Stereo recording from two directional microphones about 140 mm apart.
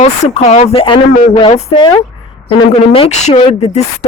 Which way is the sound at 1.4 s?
35° left (ahead or behind).